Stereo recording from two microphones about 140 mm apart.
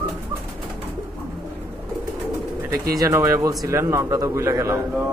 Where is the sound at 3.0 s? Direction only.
20° right (ahead or behind).